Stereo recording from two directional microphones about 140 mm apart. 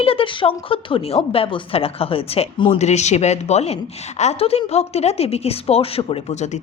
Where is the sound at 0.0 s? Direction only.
40° left (ahead or behind).